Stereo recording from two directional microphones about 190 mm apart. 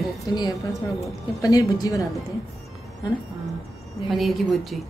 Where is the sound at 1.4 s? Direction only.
20° left (ahead or behind).